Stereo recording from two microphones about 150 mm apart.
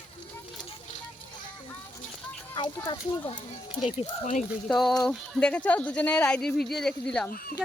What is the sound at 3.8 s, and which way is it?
Speech, 50° left (ahead or behind).